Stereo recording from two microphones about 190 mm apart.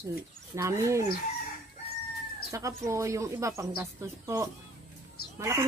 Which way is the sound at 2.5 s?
15° right (ahead or behind).